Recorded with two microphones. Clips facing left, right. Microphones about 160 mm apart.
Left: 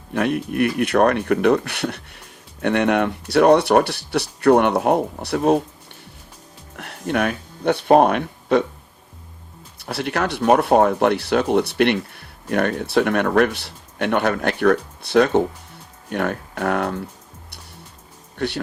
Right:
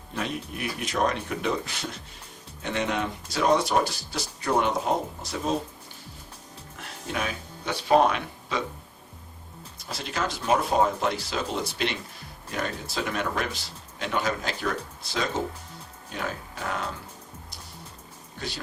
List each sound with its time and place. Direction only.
0.1 s speech: 65° left (ahead or behind)
6.7 s speech: 60° left (ahead or behind)
9.7 s speech: 65° left (ahead or behind)
18.3 s speech: 65° left (ahead or behind)